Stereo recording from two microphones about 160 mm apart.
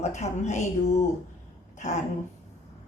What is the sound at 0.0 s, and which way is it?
Speech, 45° left (ahead or behind).